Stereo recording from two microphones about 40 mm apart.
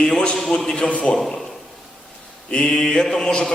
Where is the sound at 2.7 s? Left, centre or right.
Centre.